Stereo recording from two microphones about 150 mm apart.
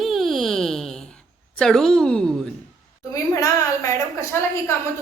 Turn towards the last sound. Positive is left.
turn(degrees=20)  # may be behind; listen again after turning